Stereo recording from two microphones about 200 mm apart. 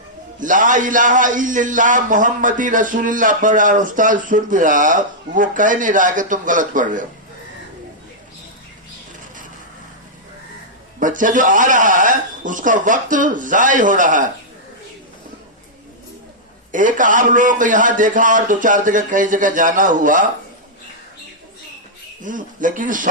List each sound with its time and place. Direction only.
0.3 s a man's voice: 40° right (ahead or behind)
11.0 s a man's voice: 40° right (ahead or behind)
16.7 s a man's voice: 40° right (ahead or behind)
22.2 s a man's voice: 40° right (ahead or behind)